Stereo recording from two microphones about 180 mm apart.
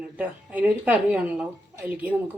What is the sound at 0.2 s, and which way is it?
Speech, 10° right (ahead or behind).